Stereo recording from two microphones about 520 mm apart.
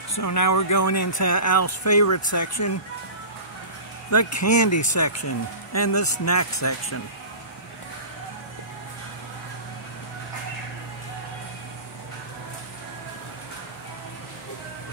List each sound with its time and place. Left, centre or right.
0.1 s speech: left
4.1 s speech: left